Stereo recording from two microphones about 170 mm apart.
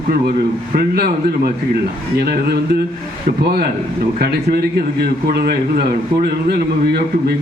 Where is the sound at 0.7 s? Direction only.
65° right (ahead or behind).